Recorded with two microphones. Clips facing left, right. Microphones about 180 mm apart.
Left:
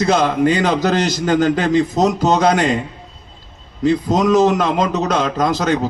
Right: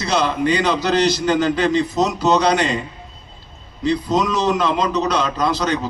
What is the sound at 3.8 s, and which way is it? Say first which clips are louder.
A man's voice: left 3 dB; 45° left (ahead or behind).